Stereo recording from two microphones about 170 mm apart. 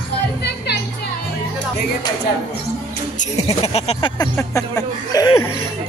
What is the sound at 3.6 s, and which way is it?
Speech, 35° left (ahead or behind).